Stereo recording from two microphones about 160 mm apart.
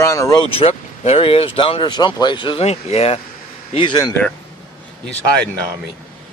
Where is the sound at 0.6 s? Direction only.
40° left (ahead or behind).